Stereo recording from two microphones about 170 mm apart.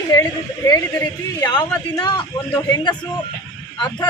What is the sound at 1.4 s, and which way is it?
Speech, 25° left (ahead or behind).